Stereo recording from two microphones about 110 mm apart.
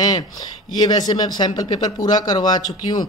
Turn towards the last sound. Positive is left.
turn(degrees=40)  # may be behind; listen again after turning